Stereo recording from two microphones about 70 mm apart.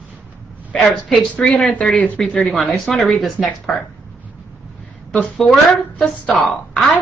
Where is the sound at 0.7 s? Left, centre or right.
Centre.